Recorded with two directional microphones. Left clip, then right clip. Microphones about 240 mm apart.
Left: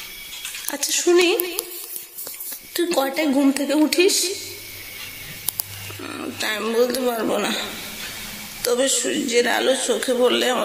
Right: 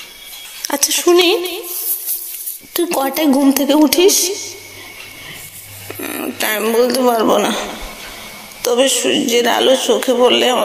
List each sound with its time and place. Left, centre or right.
0.7 s speech: right
2.7 s speech: centre
6.0 s speech: centre
8.6 s speech: centre